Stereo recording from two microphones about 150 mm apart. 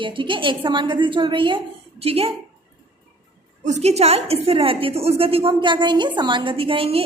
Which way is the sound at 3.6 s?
50° right (ahead or behind).